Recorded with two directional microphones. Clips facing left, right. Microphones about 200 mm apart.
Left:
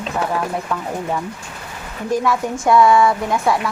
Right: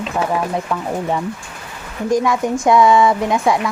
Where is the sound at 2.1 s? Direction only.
15° right (ahead or behind).